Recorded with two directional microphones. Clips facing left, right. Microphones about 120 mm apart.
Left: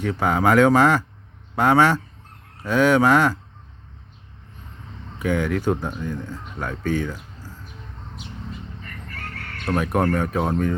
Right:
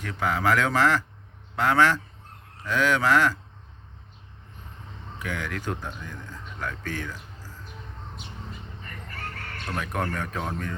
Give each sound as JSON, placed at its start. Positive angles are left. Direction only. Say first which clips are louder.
{"t": 0.2, "sound": "speech", "louder": "left 7 dB", "side_deg": 20}
{"t": 5.2, "sound": "speech", "louder": "left 10 dB", "side_deg": 20}
{"t": 9.6, "sound": "speech", "louder": "left 9 dB", "side_deg": 30}
{"t": 10.2, "sound": "speech", "louder": "left 9 dB", "side_deg": 20}